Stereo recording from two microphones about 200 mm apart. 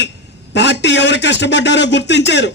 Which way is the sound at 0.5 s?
60° left (ahead or behind).